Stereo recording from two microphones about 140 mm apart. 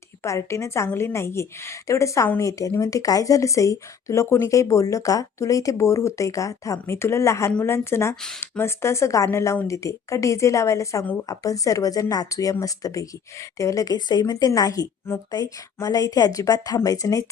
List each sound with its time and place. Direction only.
0.2 s a woman's voice: 20° left (ahead or behind)